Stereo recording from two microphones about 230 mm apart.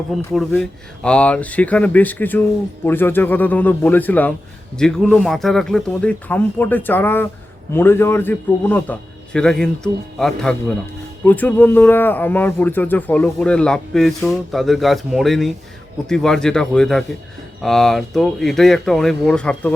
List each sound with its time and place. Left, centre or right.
0.1 s a man's voice: centre